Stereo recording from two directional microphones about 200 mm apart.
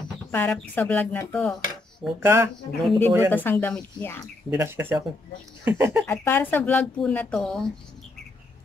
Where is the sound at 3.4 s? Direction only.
10° left (ahead or behind).